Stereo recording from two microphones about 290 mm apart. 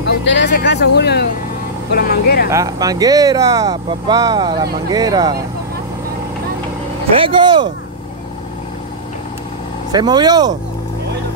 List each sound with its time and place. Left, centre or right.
0.0 s speech: left
2.5 s speech: centre
7.2 s speech: centre
9.9 s speech: centre